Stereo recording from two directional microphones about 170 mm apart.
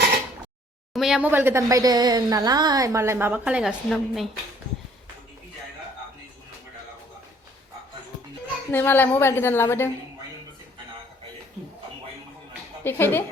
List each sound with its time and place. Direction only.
0.9 s a woman's voice: 5° right (ahead or behind)
8.7 s a woman's voice: 10° left (ahead or behind)
12.8 s a woman's voice: 15° left (ahead or behind)